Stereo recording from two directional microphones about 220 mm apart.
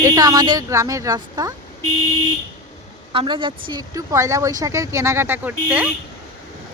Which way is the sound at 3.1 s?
25° right (ahead or behind).